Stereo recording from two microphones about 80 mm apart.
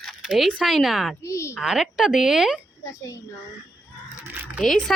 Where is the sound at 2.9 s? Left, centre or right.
Left.